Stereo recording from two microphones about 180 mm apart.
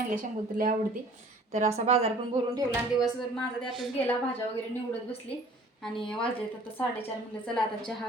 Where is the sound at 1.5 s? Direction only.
35° right (ahead or behind).